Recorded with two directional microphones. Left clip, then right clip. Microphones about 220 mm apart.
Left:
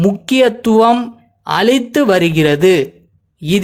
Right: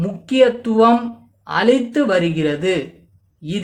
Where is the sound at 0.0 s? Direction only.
40° left (ahead or behind).